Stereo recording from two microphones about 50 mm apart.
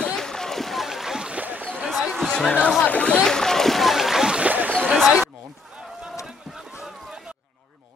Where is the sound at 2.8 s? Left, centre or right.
Left.